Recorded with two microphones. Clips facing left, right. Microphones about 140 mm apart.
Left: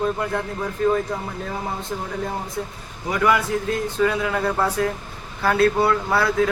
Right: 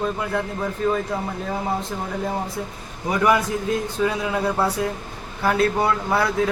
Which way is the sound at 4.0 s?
15° right (ahead or behind).